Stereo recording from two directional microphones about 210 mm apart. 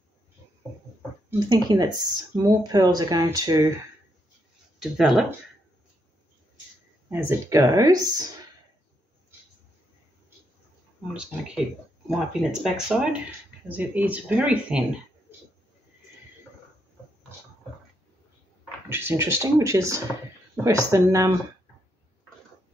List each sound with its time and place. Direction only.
1.5 s speech: 20° right (ahead or behind)
4.7 s speech: centre (ahead or behind)
7.1 s speech: 10° right (ahead or behind)
12.1 s speech: centre (ahead or behind)
18.9 s speech: 10° right (ahead or behind)